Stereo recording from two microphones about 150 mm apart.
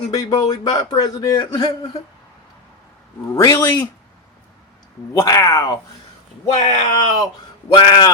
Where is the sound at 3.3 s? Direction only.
20° left (ahead or behind).